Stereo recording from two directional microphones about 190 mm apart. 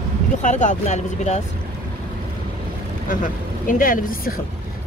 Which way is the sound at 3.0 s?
45° left (ahead or behind).